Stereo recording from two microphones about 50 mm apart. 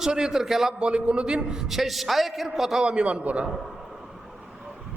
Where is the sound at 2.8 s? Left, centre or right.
Centre.